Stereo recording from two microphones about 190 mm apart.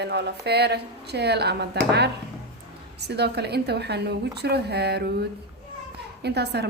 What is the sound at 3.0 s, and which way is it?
A woman's voice, 60° right (ahead or behind).